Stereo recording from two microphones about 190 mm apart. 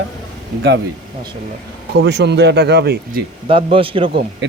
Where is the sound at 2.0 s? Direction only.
65° right (ahead or behind).